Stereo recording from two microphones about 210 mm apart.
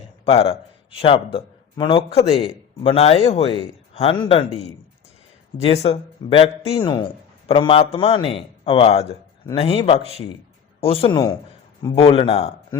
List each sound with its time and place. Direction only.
0.3 s speech: 25° left (ahead or behind)
5.6 s speech: 30° left (ahead or behind)